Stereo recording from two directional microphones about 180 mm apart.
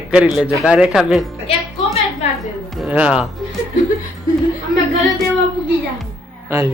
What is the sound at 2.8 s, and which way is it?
Speech, 5° right (ahead or behind).